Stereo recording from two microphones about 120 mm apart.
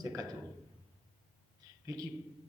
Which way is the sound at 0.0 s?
30° right (ahead or behind).